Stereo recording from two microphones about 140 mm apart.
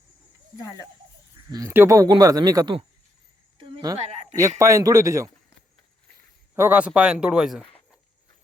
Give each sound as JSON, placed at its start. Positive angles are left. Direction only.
{"t": 1.5, "sound": "speech", "side_deg": -25}
{"t": 3.6, "sound": "cricket", "side_deg": -35}
{"t": 3.9, "sound": "a man's voice", "side_deg": -50}
{"t": 4.4, "sound": "speech", "side_deg": -20}
{"t": 6.6, "sound": "speech", "side_deg": -10}